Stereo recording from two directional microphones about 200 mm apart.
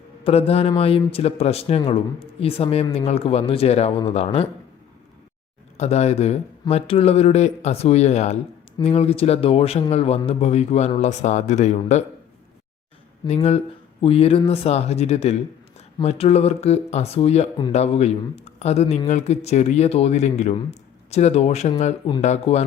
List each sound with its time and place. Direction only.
0.3 s speech: 30° left (ahead or behind)
5.7 s speech: 35° left (ahead or behind)
13.2 s speech: 30° left (ahead or behind)